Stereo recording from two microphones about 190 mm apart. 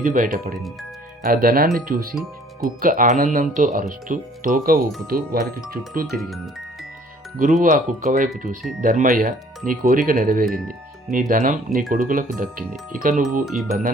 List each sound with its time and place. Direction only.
0.0 s speech: 45° right (ahead or behind)
2.1 s speech: centre (ahead or behind)
2.6 s speech: 45° right (ahead or behind)
6.1 s speech: centre (ahead or behind)
7.3 s speech: 45° right (ahead or behind)
13.4 s speech: centre (ahead or behind)